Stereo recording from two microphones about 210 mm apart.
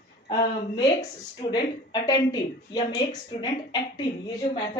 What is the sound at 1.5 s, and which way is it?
Speech, 20° left (ahead or behind).